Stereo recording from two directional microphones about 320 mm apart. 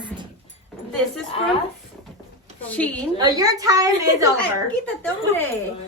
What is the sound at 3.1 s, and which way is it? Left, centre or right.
Speech, centre.